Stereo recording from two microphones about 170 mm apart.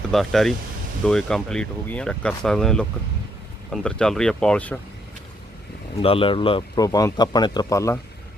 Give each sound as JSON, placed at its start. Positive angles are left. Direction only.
{"t": 0.1, "sound": "speech", "side_deg": 0}
{"t": 6.0, "sound": "speech", "side_deg": 35}